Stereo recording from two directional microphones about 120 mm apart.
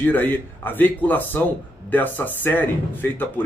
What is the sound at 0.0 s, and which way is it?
Speech, 15° left (ahead or behind).